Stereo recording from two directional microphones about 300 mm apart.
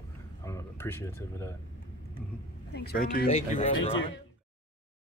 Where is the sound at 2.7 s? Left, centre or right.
Left.